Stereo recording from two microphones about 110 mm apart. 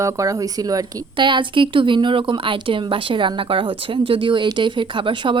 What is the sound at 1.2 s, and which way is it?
Speech, 45° right (ahead or behind).